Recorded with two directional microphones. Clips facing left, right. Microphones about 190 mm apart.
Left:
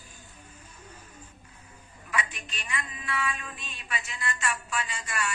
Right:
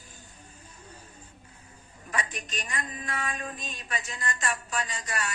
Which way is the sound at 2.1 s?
40° right (ahead or behind).